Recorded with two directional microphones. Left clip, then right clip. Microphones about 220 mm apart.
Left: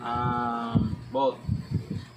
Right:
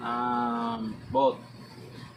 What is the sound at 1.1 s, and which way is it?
Speech, 5° left (ahead or behind).